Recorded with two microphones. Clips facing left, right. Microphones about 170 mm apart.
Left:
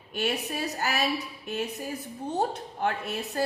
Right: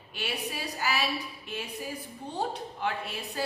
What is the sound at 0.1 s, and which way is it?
Speech, 45° left (ahead or behind).